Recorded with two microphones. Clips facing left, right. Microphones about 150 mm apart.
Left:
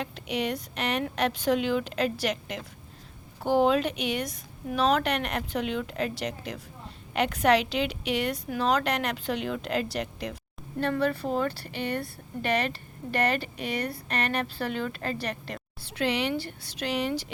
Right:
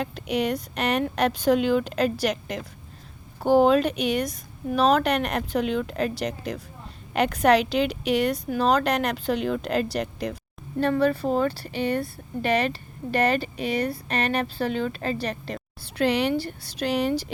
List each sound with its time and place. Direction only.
0.0 s a woman's voice: 45° right (ahead or behind)